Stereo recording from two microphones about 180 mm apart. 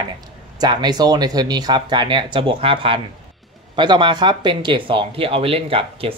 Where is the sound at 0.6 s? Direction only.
25° right (ahead or behind).